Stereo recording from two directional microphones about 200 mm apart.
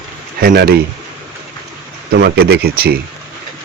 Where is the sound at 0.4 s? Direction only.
50° right (ahead or behind).